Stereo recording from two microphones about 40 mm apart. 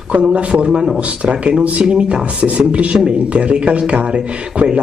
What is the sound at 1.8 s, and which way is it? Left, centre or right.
Speech, right.